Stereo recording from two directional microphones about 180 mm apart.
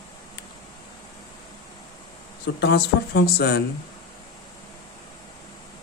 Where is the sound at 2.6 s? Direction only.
65° left (ahead or behind).